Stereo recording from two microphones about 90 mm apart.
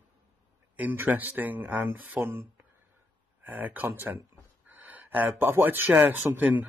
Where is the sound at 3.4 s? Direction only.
20° right (ahead or behind).